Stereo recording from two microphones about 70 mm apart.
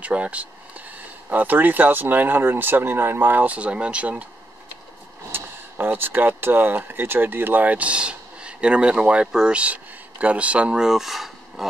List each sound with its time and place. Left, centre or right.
0.0 s speech: centre
5.3 s speech: right; by 11.6 s centre